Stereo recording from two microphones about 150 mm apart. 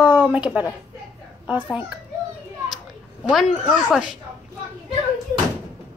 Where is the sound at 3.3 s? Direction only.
Centre (ahead or behind).